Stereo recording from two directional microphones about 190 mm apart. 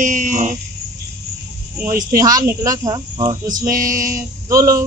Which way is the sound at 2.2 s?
20° right (ahead or behind).